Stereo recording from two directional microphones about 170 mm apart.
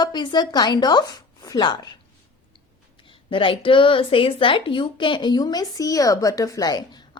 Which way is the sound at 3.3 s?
30° left (ahead or behind).